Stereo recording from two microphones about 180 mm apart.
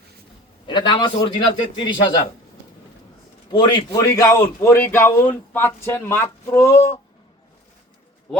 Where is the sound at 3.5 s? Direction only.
25° left (ahead or behind).